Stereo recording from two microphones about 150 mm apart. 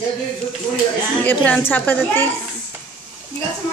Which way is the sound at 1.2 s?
10° left (ahead or behind).